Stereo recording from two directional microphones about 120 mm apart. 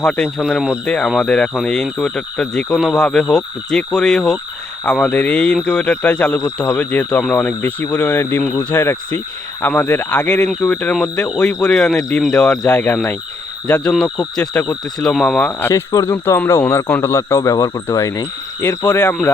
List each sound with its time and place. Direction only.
0.0 s speech: 10° left (ahead or behind)
0.4 s speech: 5° right (ahead or behind)
15.7 s speech: 25° left (ahead or behind)